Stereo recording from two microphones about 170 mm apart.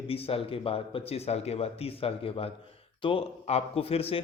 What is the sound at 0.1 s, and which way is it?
A man's voice, 35° left (ahead or behind).